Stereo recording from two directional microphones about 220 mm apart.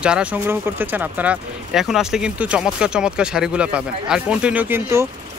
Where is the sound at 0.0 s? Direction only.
5° right (ahead or behind).